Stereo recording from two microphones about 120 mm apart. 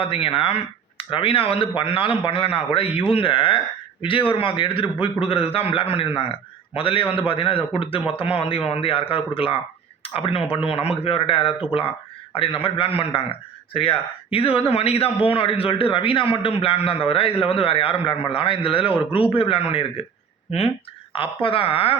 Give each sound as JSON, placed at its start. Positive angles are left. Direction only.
{"t": 0.0, "sound": "a man's voice", "side_deg": 50}